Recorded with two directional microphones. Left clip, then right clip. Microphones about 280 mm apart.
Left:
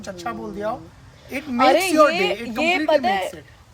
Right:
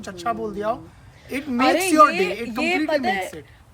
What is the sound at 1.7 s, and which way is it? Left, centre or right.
A woman's voice, centre.